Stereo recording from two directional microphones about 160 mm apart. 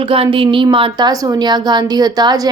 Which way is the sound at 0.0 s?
35° right (ahead or behind).